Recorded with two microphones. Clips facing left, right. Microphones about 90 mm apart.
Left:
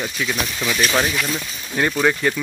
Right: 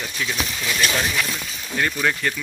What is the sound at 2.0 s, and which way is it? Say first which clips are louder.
Speech: left 4 dB; 15° left (ahead or behind).